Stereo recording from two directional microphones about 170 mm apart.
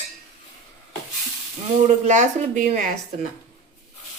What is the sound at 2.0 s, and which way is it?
Speech, 45° right (ahead or behind).